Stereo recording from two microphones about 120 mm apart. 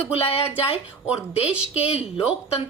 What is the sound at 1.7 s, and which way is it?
Speech, 55° left (ahead or behind).